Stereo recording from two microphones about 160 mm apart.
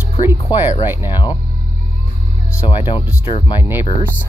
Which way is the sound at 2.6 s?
30° left (ahead or behind).